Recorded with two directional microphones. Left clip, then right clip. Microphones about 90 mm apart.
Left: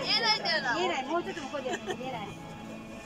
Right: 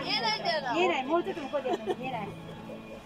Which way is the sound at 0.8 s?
35° right (ahead or behind).